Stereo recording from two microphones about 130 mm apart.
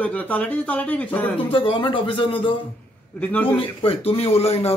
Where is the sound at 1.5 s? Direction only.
40° left (ahead or behind).